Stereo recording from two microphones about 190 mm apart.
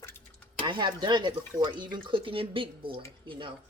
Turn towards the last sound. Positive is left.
turn(degrees=-25)  # may be behind; listen again after turning